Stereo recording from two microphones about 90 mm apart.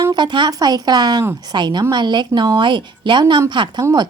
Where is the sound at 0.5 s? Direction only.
45° right (ahead or behind).